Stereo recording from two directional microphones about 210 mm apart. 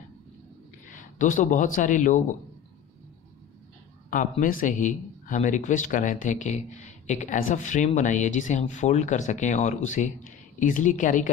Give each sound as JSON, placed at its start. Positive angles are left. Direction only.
{"t": 0.8, "sound": "speech", "side_deg": 35}
{"t": 4.1, "sound": "speech", "side_deg": 40}